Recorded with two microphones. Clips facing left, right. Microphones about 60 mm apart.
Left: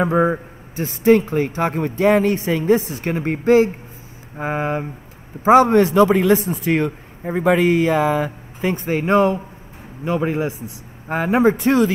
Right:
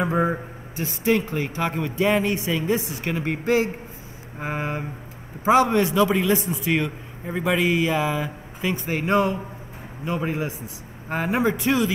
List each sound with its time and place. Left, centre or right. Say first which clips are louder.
0.7 s speech: left 8 dB; left
7.2 s speech: left 7 dB; left
7.5 s speech: left 4 dB; left